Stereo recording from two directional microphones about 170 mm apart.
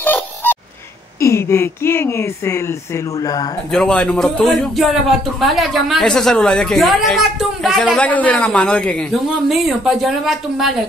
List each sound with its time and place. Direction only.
0.0 s a sound: 10° left (ahead or behind)
1.2 s speech: 15° left (ahead or behind)
3.7 s a man's voice: 5° left (ahead or behind)